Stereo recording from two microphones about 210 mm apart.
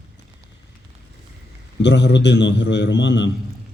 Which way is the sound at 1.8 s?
55° left (ahead or behind).